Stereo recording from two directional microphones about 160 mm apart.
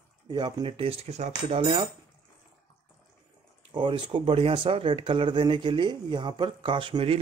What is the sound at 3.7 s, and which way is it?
Speech, 30° right (ahead or behind).